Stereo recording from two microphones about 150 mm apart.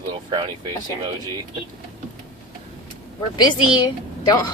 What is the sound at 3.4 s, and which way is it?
Speech, 25° left (ahead or behind).